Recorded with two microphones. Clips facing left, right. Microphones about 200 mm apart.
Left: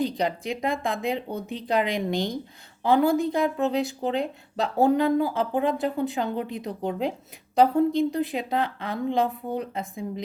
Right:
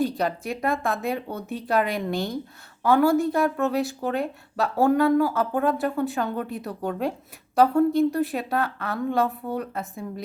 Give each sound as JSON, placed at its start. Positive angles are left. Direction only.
{"t": 0.0, "sound": "speech", "side_deg": 15}